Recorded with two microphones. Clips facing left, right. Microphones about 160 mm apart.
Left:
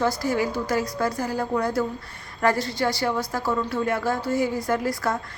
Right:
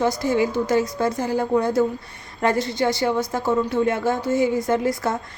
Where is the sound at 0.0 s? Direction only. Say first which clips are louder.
Right 3 dB; 20° right (ahead or behind).